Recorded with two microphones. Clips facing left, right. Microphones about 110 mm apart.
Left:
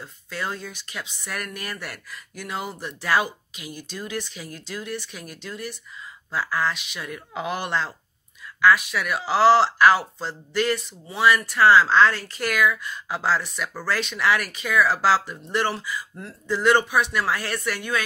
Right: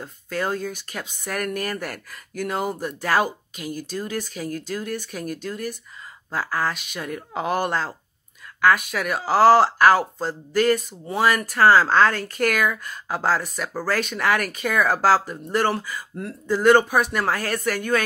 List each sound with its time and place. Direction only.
0.0 s speech: 45° right (ahead or behind)